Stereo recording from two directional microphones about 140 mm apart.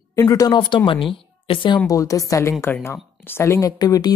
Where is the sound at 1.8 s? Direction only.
25° left (ahead or behind).